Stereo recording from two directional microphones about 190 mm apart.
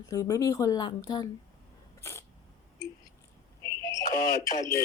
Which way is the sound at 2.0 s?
15° left (ahead or behind).